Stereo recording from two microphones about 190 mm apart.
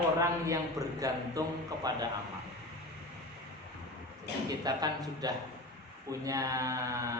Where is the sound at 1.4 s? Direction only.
20° right (ahead or behind).